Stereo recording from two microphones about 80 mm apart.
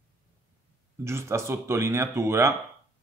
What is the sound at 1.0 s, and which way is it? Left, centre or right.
Speech, right.